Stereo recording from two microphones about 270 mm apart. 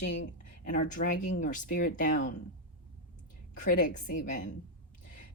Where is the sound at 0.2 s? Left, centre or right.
Left.